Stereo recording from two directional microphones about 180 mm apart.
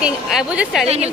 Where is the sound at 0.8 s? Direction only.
35° right (ahead or behind).